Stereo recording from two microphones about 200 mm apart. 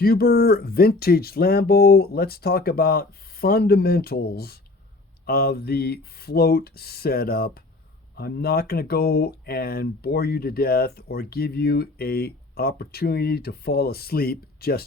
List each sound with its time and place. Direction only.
0.0 s speech: 50° left (ahead or behind)